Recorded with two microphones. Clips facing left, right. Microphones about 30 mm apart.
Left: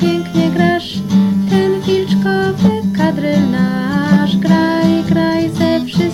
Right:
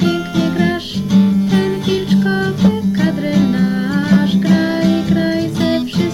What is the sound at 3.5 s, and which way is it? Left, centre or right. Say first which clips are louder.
Music: left 1 dB; centre.